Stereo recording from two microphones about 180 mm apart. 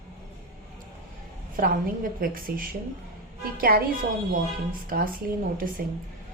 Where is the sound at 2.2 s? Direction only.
55° right (ahead or behind).